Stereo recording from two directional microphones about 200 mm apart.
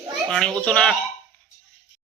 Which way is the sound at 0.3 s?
5° left (ahead or behind).